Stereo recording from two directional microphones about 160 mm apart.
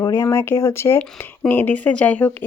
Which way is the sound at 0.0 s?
20° left (ahead or behind).